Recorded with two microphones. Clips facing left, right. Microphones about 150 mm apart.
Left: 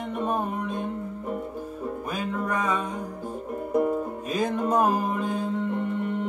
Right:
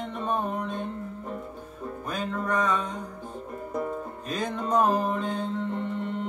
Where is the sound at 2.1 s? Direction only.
10° left (ahead or behind).